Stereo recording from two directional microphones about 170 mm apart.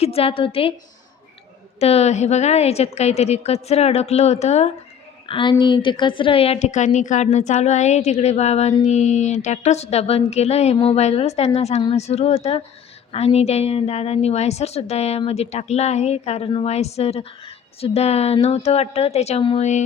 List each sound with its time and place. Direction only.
0.0 s a woman's voice: 35° left (ahead or behind)
1.8 s a woman's voice: 40° left (ahead or behind)
5.3 s a woman's voice: 30° left (ahead or behind)